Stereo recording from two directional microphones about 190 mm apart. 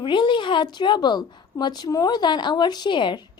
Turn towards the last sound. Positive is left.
turn(degrees=25)  # may be behind; listen again after turning